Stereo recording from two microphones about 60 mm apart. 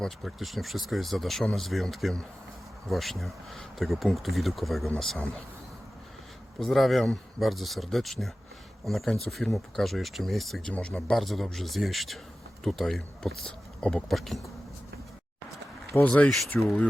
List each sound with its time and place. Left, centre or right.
0.3 s speech: centre
6.6 s speech: centre
10.7 s speech: centre
11.1 s speech: centre
15.9 s speech: left
16.5 s speech: centre